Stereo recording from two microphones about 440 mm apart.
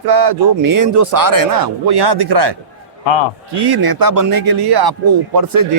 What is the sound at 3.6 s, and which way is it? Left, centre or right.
Speech, right.